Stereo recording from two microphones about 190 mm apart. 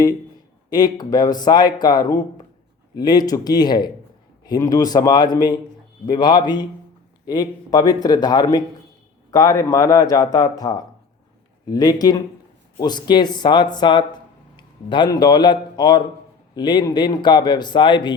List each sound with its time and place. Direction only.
0.7 s a man's voice: 20° left (ahead or behind)